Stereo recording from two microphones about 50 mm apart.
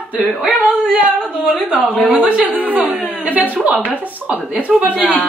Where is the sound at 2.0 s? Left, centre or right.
Right.